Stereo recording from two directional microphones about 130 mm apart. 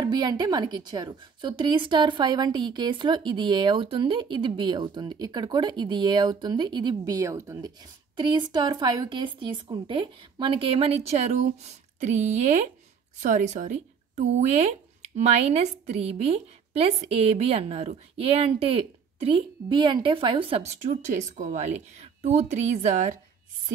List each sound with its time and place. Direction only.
0.0 s a woman's voice: 30° right (ahead or behind)
8.2 s speech: 35° right (ahead or behind)
21.1 s speech: 70° right (ahead or behind)